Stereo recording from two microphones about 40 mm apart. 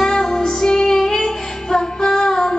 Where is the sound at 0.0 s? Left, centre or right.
Centre.